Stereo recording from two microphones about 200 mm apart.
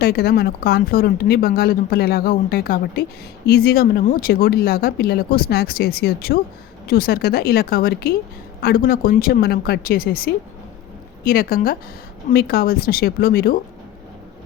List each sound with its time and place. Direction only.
0.0 s speech: 50° left (ahead or behind)